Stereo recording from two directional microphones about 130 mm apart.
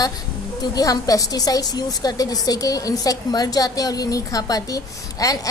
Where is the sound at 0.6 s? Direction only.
30° left (ahead or behind).